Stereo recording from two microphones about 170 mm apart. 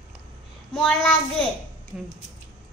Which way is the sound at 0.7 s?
5° left (ahead or behind).